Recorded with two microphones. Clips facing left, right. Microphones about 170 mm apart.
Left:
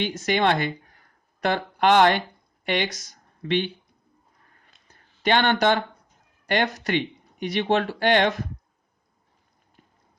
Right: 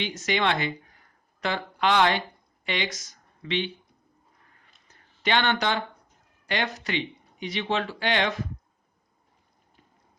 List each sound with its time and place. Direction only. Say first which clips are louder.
0.3 s speech: left 4 dB; 45° left (ahead or behind)
3.1 s a sound: left 6 dB; 50° left (ahead or behind)
6.5 s speech: left 5 dB; 60° left (ahead or behind)